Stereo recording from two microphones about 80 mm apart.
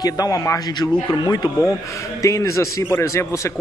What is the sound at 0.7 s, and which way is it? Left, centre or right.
Speech, left.